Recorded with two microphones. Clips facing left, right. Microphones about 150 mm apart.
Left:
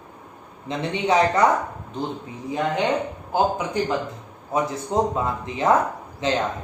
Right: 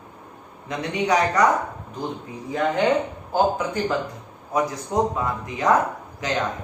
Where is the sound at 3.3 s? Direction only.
20° left (ahead or behind).